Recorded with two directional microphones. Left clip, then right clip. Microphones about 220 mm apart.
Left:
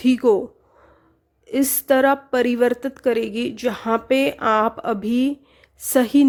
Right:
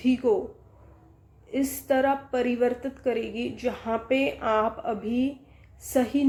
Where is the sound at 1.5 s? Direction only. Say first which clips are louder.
Left 7 dB; 50° left (ahead or behind).